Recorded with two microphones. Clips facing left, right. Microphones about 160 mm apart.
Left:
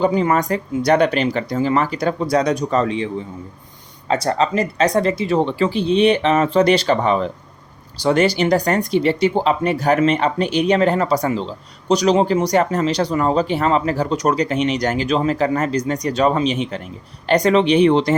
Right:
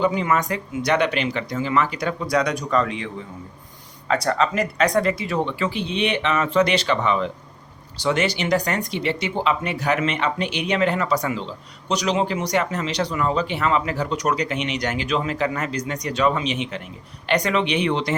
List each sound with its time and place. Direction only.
0.0 s speech: 35° left (ahead or behind)
4.1 s speech: 25° left (ahead or behind)